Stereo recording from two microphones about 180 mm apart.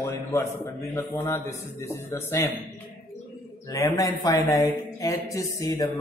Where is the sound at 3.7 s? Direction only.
20° left (ahead or behind).